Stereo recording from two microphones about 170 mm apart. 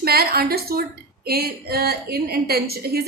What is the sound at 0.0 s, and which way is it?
A woman's voice, 65° right (ahead or behind).